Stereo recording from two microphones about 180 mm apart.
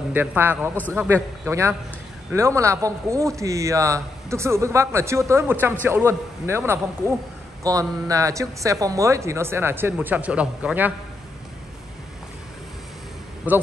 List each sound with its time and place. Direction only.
0.1 s a man's voice: 10° right (ahead or behind)
13.5 s speech: 10° right (ahead or behind)